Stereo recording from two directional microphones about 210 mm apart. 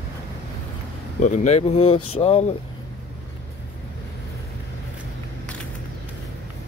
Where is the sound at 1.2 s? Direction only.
35° left (ahead or behind).